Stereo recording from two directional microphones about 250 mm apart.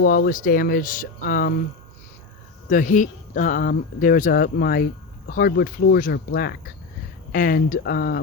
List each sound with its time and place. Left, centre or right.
0.0 s speech: left
2.6 s speech: left